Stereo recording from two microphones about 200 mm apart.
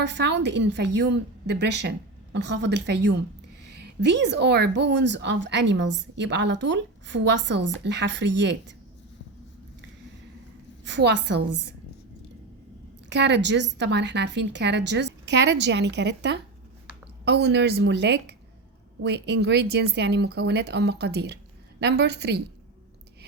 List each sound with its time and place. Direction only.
0.0 s a woman's voice: 60° right (ahead or behind)
10.8 s a woman's voice: 60° right (ahead or behind)
13.1 s a woman's voice: 60° right (ahead or behind)